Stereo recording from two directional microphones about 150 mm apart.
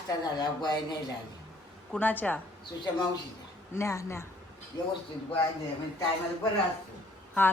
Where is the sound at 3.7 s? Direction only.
20° left (ahead or behind).